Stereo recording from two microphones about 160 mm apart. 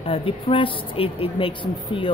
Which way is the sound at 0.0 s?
35° left (ahead or behind).